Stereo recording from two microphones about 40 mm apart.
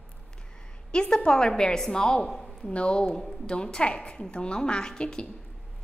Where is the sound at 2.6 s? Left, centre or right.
Left.